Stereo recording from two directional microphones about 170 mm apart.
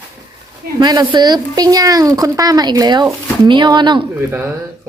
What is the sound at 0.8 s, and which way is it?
Speech, 25° right (ahead or behind).